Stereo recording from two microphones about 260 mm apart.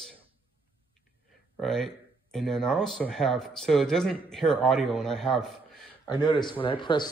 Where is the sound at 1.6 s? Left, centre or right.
Centre.